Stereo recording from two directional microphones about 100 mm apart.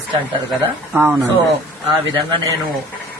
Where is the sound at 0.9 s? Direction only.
20° right (ahead or behind).